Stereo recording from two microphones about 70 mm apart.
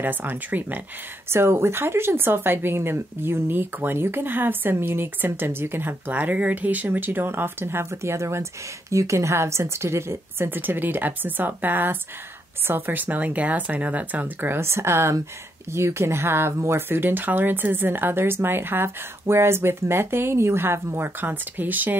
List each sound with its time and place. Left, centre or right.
0.0 s speech: right
1.3 s speech: right